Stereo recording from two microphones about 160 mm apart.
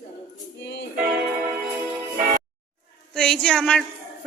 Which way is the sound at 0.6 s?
90° left.